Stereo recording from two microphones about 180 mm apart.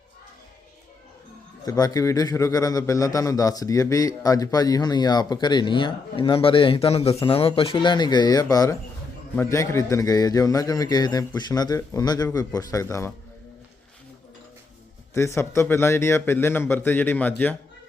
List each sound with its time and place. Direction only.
1.6 s a man's voice: 20° left (ahead or behind)
15.1 s a man's voice: 15° left (ahead or behind)